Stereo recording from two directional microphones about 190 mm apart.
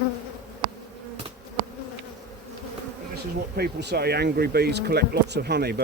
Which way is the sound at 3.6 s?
60° right (ahead or behind).